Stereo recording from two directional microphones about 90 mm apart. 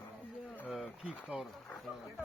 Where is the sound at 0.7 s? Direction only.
Centre (ahead or behind).